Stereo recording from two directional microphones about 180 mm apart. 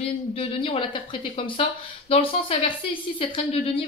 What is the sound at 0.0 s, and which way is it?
Speech, 35° left (ahead or behind).